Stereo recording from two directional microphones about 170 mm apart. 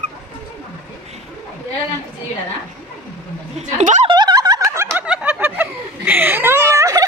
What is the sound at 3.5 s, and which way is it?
Speech, 45° right (ahead or behind).